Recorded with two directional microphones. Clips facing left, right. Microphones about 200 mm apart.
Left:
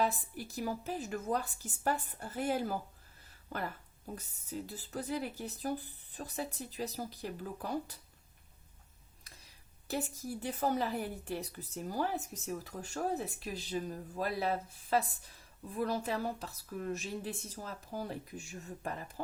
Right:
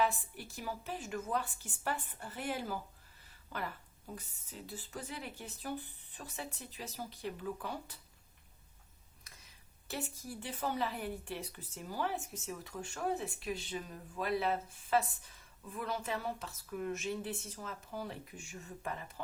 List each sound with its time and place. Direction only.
0.0 s a woman's voice: 40° left (ahead or behind)
4.2 s a woman's voice: 40° left (ahead or behind)
10.4 s a woman's voice: 40° left (ahead or behind)